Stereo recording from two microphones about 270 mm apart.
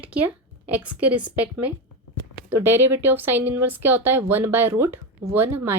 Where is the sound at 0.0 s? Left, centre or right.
Centre.